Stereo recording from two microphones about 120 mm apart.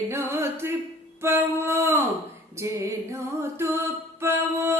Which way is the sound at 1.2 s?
20° right (ahead or behind).